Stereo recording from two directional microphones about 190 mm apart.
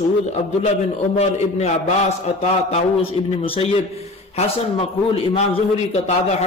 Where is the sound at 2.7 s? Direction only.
30° left (ahead or behind).